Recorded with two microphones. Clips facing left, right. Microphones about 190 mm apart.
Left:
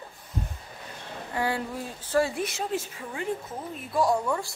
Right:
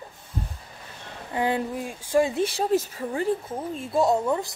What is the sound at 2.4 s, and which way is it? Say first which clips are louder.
A woman's voice: right 7 dB; 35° right (ahead or behind).